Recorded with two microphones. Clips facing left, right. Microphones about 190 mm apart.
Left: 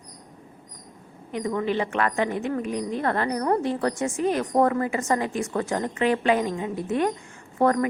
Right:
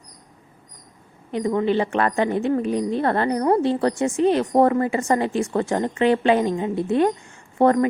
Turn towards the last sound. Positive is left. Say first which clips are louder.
# right 4 dB
turn(degrees=-30)  # may be behind; listen again after turning